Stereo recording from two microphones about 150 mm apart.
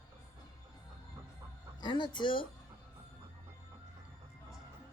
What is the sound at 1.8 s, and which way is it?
Speech, 30° left (ahead or behind).